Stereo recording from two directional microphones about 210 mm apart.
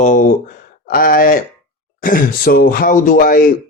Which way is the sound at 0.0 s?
40° left (ahead or behind).